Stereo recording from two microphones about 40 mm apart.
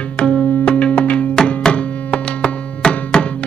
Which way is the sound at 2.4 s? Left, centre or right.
Left.